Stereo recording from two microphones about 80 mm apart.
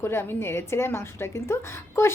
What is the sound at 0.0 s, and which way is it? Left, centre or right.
A woman's voice, left.